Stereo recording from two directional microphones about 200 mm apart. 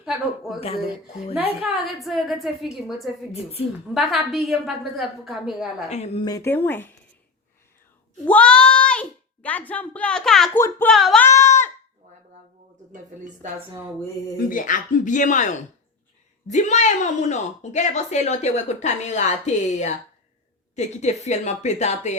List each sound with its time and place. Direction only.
0.5 s a woman's voice: centre (ahead or behind)
1.3 s a woman's voice: 30° left (ahead or behind)
1.7 s a woman's voice: centre (ahead or behind)
5.9 s a woman's voice: 30° left (ahead or behind)
6.2 s speech: 15° left (ahead or behind)
8.2 s a child's voice: 5° left (ahead or behind)
11.3 s goat: 15° left (ahead or behind)
12.9 s speech: 40° right (ahead or behind)
14.3 s a woman's voice: 40° left (ahead or behind)